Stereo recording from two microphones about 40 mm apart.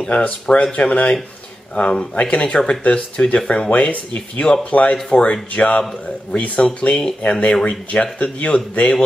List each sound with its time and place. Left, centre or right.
0.5 s speech: left
0.7 s speech: left
1.8 s speech: left